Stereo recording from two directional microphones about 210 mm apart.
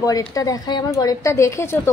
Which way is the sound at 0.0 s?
15° left (ahead or behind).